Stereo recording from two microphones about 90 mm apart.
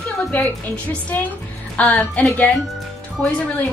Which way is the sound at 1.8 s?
15° left (ahead or behind).